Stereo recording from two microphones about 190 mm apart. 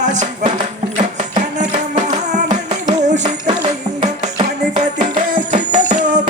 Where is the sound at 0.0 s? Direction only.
40° right (ahead or behind).